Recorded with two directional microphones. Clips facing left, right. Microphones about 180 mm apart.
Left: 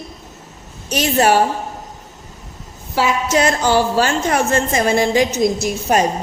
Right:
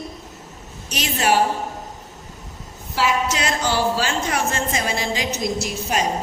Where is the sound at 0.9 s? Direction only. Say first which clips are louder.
Left 7 dB; 45° left (ahead or behind).